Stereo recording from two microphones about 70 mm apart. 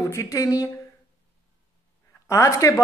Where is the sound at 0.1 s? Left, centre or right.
Left.